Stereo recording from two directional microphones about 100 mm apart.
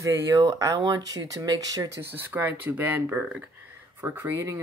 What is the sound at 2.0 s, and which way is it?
Speech, 20° right (ahead or behind).